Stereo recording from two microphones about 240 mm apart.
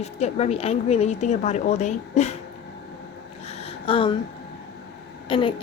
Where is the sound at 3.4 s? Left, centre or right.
Left.